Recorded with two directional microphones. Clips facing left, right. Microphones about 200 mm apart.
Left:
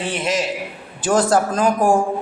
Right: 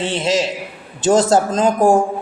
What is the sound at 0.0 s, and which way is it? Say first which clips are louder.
Speech: right 3 dB; 25° right (ahead or behind).